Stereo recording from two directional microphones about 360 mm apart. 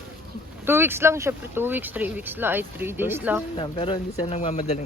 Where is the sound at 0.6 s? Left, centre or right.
Centre.